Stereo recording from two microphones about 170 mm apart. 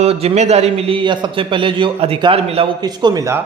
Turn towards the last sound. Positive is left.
turn(degrees=-20)  # may be behind; listen again after turning